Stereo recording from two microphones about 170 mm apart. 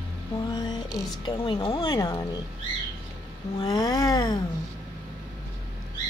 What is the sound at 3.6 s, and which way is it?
Child singing, 25° left (ahead or behind).